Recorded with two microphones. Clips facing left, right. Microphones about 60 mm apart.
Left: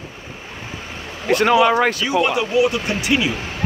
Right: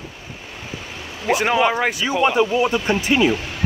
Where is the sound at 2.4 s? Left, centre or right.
Right.